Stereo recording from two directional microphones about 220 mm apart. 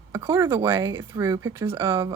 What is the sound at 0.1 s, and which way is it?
Speech, 15° right (ahead or behind).